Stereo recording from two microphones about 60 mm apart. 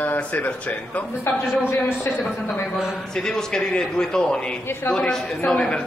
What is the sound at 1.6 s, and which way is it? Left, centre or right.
Speech, left.